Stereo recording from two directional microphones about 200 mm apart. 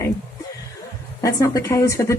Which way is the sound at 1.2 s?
15° left (ahead or behind).